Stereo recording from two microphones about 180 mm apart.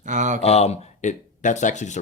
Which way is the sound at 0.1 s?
40° right (ahead or behind).